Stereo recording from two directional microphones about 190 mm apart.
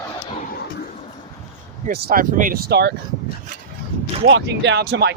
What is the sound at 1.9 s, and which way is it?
Speech, 50° right (ahead or behind).